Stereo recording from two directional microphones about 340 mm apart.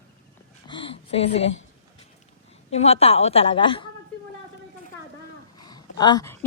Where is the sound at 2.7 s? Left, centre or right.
Centre.